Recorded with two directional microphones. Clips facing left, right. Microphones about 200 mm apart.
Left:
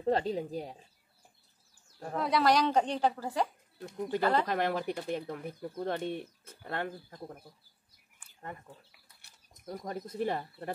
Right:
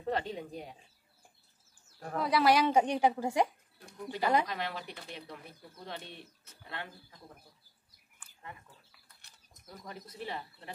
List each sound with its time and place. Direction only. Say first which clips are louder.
0.0 s speech: left 5 dB; 35° left (ahead or behind)
2.1 s a woman's voice: even; centre (ahead or behind)
4.5 s speech: left 8 dB; 50° left (ahead or behind)
9.7 s speech: left 9 dB; 50° left (ahead or behind)